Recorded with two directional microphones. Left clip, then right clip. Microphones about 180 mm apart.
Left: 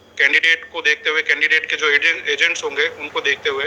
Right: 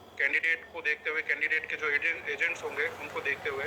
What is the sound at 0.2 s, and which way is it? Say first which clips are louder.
A man's voice: left 13 dB; 45° left (ahead or behind).